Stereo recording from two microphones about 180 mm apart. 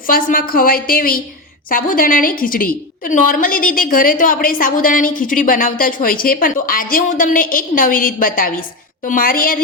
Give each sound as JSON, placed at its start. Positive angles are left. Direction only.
{"t": 0.1, "sound": "a woman's voice", "side_deg": 50}